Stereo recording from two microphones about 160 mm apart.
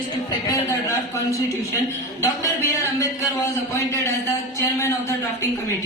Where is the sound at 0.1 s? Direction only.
25° left (ahead or behind).